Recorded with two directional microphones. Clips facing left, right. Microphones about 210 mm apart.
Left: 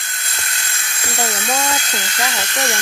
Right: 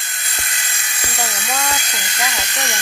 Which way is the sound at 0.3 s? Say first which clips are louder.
Even; 15° right (ahead or behind).